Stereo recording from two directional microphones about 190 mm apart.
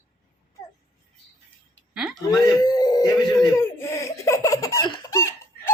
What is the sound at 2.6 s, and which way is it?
Speech, 20° left (ahead or behind).